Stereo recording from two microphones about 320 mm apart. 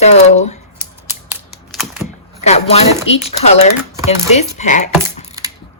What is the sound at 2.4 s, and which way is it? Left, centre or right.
Speech, centre.